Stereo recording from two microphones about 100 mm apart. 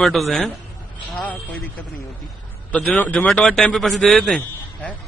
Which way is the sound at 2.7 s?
15° left (ahead or behind).